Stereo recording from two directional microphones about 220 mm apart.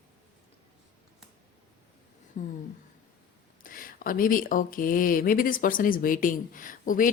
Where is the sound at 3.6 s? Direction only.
40° left (ahead or behind).